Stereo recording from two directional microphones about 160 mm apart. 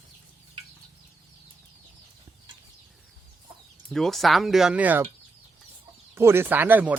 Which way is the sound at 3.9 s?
Centre (ahead or behind).